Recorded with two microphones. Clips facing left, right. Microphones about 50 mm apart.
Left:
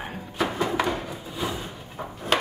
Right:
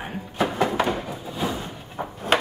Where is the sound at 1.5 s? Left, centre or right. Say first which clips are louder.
Right 2 dB; right.